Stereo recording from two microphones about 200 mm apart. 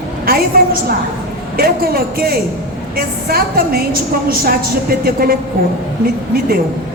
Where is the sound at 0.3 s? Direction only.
50° right (ahead or behind).